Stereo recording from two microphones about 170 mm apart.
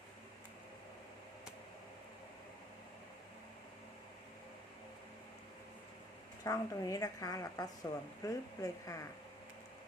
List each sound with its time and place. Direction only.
6.4 s a woman's voice: 20° left (ahead or behind)